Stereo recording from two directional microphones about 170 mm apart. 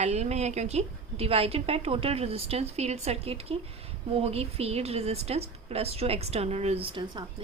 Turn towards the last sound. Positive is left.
turn(degrees=-30)  # may be behind; listen again after turning